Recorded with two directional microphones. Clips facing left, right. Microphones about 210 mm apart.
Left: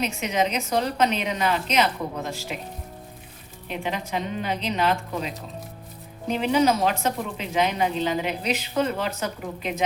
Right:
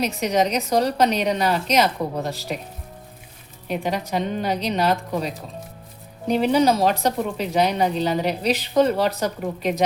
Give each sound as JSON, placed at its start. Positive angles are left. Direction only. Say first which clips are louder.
{"t": 0.0, "sound": "a woman's voice", "louder": "right 4 dB", "side_deg": -40}
{"t": 3.7, "sound": "a woman's voice", "louder": "right 4 dB", "side_deg": -40}